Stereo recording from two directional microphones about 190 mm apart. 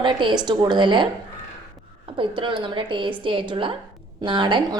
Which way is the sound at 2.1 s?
25° right (ahead or behind).